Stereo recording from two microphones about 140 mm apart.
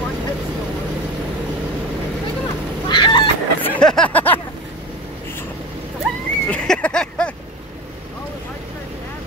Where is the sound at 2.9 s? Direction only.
35° left (ahead or behind).